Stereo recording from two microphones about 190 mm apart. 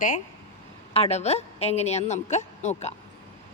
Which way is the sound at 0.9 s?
35° left (ahead or behind).